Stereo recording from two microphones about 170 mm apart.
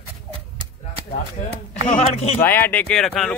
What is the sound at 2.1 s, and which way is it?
Speech, 40° left (ahead or behind).